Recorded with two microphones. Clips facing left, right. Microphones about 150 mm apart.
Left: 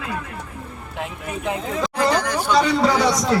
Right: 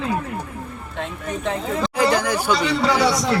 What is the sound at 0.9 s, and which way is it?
Speech, 5° left (ahead or behind).